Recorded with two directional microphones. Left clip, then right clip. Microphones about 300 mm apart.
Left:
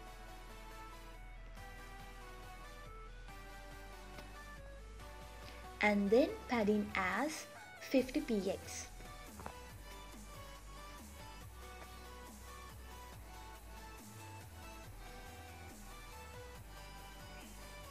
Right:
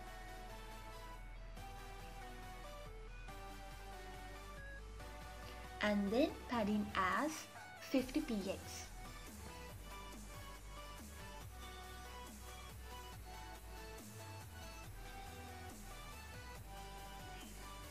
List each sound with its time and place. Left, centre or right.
5.8 s speech: centre